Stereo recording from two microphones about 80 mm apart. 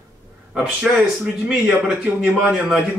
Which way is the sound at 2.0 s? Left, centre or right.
Centre.